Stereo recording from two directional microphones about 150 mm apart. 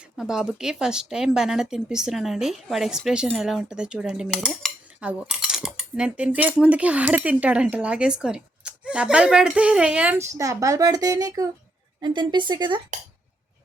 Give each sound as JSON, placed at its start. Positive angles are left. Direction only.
{"t": 0.2, "sound": "speech", "side_deg": -5}